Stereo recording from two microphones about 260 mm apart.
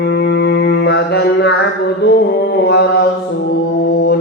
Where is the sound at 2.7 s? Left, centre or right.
Left.